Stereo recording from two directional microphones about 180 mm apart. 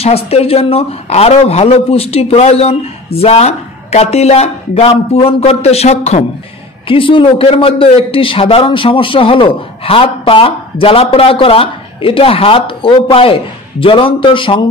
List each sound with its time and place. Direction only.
0.0 s a man's voice: 35° left (ahead or behind)